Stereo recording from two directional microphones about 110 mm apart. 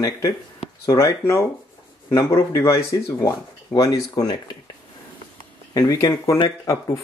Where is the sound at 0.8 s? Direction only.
25° left (ahead or behind).